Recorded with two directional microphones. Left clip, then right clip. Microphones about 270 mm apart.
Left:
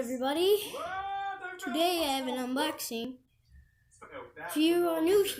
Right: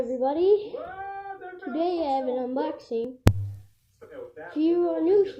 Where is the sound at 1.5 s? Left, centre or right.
Left.